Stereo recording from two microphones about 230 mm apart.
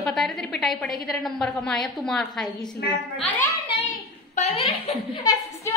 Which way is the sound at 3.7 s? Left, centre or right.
Left.